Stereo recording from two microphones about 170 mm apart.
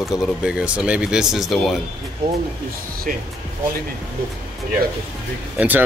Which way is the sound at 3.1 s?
55° right (ahead or behind).